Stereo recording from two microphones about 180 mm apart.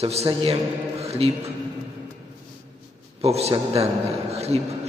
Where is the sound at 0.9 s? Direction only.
35° right (ahead or behind).